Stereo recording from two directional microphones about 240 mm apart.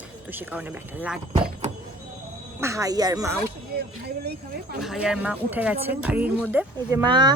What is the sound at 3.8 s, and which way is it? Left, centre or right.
Speech, right.